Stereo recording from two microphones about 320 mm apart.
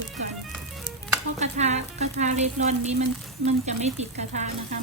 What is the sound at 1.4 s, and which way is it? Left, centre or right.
Speech, right.